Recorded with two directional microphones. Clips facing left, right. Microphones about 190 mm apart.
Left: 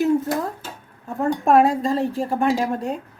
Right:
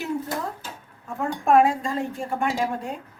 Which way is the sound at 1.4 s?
35° left (ahead or behind).